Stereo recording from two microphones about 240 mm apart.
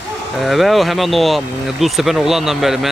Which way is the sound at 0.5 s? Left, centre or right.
Centre.